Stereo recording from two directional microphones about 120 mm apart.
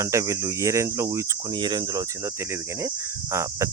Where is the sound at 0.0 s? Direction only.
25° right (ahead or behind).